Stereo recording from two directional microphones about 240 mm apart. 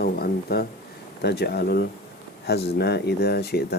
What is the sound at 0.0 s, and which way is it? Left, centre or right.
Speech, left.